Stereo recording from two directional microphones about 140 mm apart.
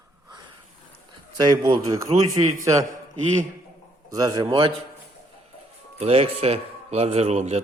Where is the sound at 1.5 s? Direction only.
25° right (ahead or behind).